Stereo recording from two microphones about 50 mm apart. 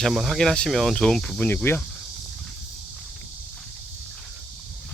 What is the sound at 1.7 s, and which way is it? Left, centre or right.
Speech, left.